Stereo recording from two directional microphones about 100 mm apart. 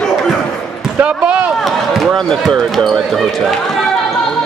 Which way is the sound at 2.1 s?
5° left (ahead or behind).